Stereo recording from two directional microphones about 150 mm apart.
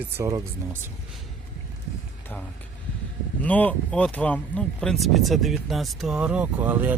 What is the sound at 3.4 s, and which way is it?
Speech, 10° left (ahead or behind).